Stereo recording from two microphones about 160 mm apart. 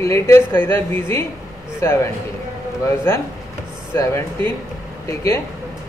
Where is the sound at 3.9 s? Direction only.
15° left (ahead or behind).